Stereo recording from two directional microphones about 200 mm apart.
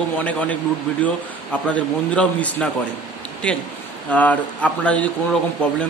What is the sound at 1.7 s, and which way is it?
A man's voice, 5° left (ahead or behind).